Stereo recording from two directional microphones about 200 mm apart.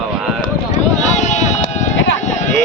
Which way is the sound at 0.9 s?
35° left (ahead or behind).